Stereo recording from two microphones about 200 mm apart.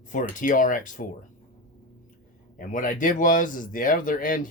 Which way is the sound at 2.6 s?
40° left (ahead or behind).